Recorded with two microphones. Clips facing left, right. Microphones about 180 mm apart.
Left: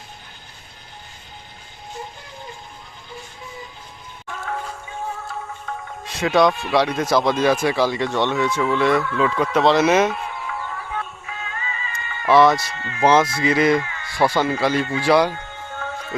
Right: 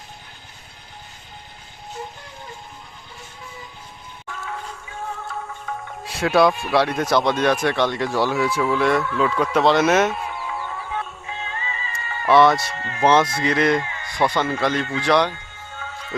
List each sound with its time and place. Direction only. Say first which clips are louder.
6.1 s speech: even; centre (ahead or behind)
6.7 s speech: left 1 dB; centre (ahead or behind)
10.5 s chicken: left 1 dB; 20° right (ahead or behind)
10.9 s music: right 1 dB; 30° right (ahead or behind)
12.3 s speech: even; centre (ahead or behind)
12.7 s speech: right 1 dB; 35° right (ahead or behind)
13.0 s speech: left 1 dB; centre (ahead or behind)
13.8 s a sound: right 1 dB; 25° right (ahead or behind)
14.2 s speech: left 2 dB; 5° left (ahead or behind)
15.3 s music: left 5 dB; 55° left (ahead or behind)